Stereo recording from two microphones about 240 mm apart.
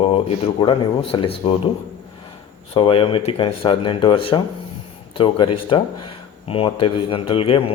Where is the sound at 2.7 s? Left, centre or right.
Left.